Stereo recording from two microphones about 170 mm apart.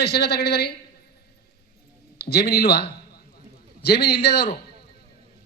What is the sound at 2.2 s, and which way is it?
A man's voice, 75° left (ahead or behind).